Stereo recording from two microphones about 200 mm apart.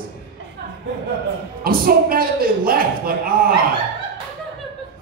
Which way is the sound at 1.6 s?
50° right (ahead or behind).